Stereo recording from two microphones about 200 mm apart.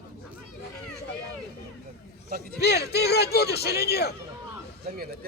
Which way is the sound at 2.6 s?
55° left (ahead or behind).